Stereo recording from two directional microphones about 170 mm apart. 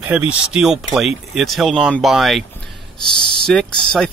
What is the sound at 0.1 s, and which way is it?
Speech, 5° right (ahead or behind).